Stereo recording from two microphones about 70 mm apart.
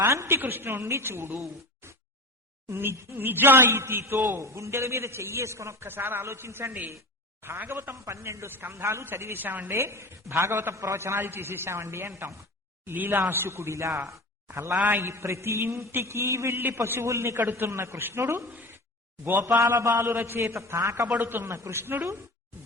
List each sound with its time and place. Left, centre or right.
0.1 s a man's voice: right
1.8 s a sound: right
2.6 s a man's voice: right
8.7 s a man's voice: right
9.0 s a man's voice: right
19.5 s a man's voice: right
21.2 s a man's voice: right